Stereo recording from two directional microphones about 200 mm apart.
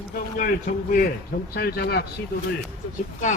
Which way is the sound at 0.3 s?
45° left (ahead or behind).